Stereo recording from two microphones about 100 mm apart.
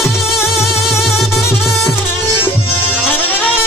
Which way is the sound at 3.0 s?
15° left (ahead or behind).